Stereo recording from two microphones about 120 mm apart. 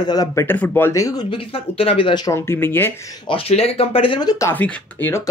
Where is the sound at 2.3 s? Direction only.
20° left (ahead or behind).